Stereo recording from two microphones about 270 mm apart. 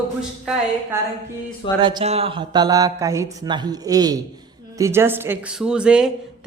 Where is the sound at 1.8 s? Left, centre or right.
Right.